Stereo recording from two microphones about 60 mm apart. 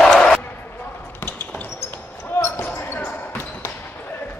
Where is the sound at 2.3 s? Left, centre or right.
Left.